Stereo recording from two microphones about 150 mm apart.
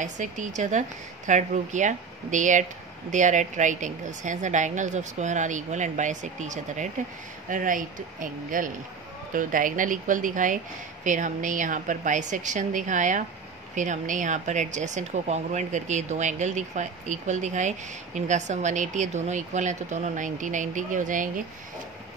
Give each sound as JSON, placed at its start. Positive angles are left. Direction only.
{"t": 0.0, "sound": "a woman's voice", "side_deg": -55}